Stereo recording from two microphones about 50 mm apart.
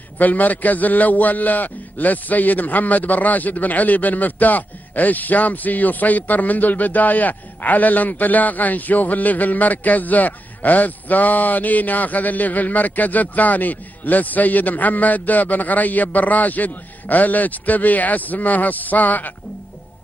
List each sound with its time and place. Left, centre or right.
0.2 s a man's voice: left